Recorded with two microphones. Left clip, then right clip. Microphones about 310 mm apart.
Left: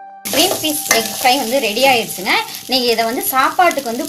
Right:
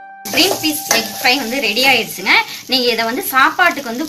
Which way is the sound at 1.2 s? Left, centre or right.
Left.